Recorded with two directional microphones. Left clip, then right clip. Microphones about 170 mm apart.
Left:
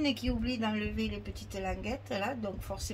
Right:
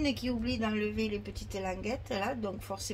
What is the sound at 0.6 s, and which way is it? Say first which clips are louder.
A woman's voice: right 2 dB; 35° right (ahead or behind).